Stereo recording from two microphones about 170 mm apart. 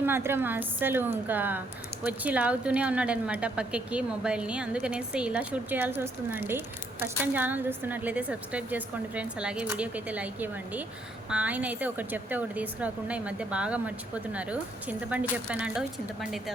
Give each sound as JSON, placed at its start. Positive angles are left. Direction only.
{"t": 0.0, "sound": "a woman's voice", "side_deg": -15}